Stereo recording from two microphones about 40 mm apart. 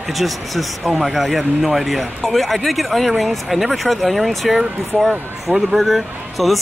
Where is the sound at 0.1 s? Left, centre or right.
Centre.